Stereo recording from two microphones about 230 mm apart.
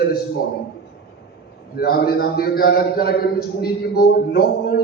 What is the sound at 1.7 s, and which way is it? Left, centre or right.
A man's voice, left.